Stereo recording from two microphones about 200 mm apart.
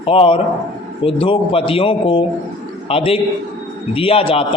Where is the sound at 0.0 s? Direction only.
30° left (ahead or behind).